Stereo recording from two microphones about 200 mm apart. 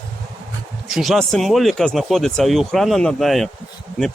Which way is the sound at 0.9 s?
Centre (ahead or behind).